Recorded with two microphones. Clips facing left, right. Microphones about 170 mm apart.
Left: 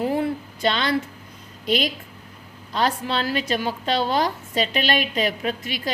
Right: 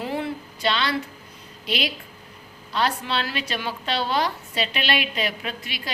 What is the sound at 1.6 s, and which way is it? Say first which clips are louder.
A woman's voice: left 5 dB; 45° left (ahead or behind).